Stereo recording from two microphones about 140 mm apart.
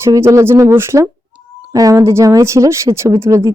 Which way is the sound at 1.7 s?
25° right (ahead or behind).